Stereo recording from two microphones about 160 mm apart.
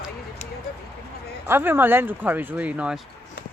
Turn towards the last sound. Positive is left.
turn(degrees=-5)  # may be behind; listen again after turning